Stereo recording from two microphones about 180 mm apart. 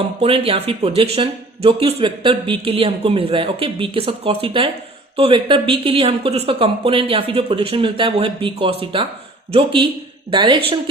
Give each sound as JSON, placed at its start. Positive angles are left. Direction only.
{"t": 0.2, "sound": "speech", "side_deg": -30}